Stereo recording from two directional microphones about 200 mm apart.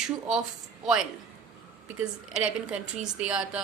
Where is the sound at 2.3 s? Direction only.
5° right (ahead or behind).